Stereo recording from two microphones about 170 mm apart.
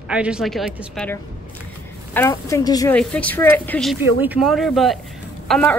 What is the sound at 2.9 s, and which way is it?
A woman's voice, 5° left (ahead or behind).